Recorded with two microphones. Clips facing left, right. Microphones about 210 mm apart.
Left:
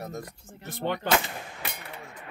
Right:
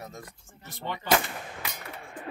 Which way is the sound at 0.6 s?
65° left (ahead or behind).